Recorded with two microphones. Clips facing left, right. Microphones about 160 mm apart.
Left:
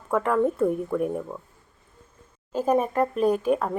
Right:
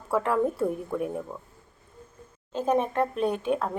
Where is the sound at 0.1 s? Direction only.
Centre (ahead or behind).